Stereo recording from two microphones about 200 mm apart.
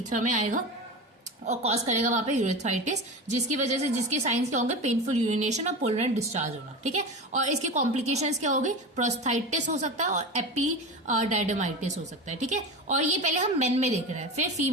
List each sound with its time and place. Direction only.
0.1 s a woman's voice: 40° right (ahead or behind)